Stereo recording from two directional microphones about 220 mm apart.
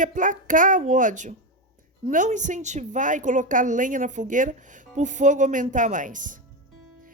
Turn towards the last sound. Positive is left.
turn(degrees=-35)  # may be behind; listen again after turning